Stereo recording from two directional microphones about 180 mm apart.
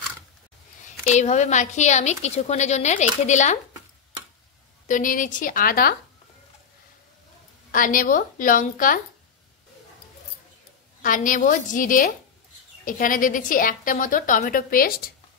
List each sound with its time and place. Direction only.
1.1 s a woman's voice: 40° left (ahead or behind)
4.8 s a woman's voice: 45° left (ahead or behind)
7.7 s a woman's voice: 50° left (ahead or behind)
11.0 s a woman's voice: 45° left (ahead or behind)